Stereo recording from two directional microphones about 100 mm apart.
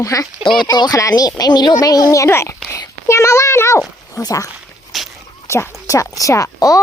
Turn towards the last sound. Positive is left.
turn(degrees=35)  # may be behind; listen again after turning